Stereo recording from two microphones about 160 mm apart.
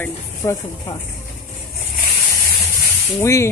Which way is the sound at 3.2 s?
20° left (ahead or behind).